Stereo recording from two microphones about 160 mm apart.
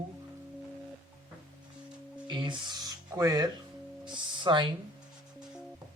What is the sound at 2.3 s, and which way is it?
Speech, 30° right (ahead or behind).